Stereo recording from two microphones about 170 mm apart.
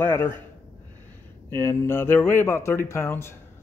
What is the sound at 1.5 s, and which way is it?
Speech, 15° left (ahead or behind).